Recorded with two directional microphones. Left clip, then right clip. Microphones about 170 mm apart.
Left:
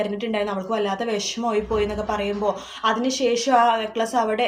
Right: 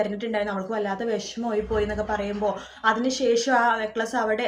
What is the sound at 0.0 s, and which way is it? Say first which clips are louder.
A woman's voice: left 1 dB; 10° left (ahead or behind).